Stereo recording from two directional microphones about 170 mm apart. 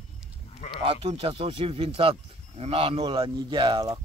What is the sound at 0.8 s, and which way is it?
Speech, 35° right (ahead or behind).